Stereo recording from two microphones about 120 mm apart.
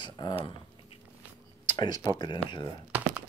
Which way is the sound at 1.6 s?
35° left (ahead or behind).